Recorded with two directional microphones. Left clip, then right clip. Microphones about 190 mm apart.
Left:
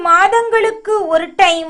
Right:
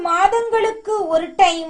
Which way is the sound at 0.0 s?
10° left (ahead or behind).